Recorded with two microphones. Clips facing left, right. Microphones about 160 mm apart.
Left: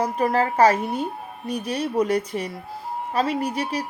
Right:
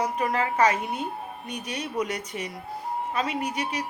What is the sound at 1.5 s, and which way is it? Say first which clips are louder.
A woman's voice: left 9 dB; 35° left (ahead or behind).